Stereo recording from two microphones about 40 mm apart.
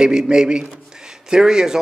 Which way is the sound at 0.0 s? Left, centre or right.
Centre.